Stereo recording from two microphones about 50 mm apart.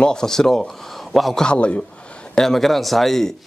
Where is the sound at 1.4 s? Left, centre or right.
Left.